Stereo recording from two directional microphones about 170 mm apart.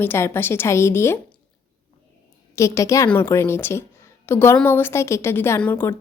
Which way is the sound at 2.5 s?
20° left (ahead or behind).